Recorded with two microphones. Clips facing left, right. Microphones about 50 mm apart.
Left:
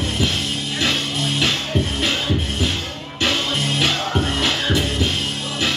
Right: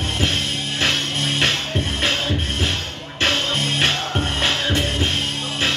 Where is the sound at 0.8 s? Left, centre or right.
Right.